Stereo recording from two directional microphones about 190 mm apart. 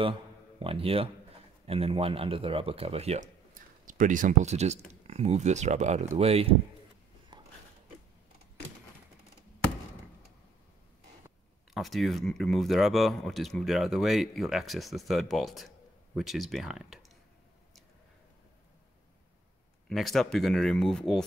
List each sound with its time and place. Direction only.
0.0 s a man's voice: 25° right (ahead or behind)
11.7 s speech: centre (ahead or behind)
19.9 s speech: centre (ahead or behind)